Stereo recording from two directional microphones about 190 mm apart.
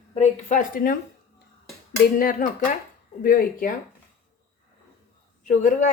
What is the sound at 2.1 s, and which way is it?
Speech, 45° left (ahead or behind).